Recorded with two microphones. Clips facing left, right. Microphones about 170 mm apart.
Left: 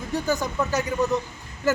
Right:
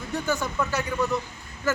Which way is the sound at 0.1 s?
35° left (ahead or behind).